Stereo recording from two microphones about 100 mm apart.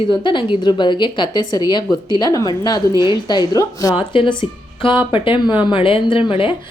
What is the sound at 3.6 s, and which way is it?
Speech, 35° left (ahead or behind).